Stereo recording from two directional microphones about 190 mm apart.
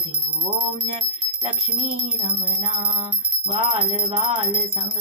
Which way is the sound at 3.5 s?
25° right (ahead or behind).